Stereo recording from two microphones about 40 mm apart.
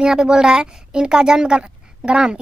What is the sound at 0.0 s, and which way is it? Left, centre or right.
A woman's voice, centre.